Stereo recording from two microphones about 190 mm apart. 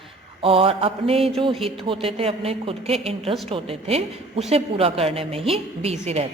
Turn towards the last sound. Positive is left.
turn(degrees=-35)  # may be behind; listen again after turning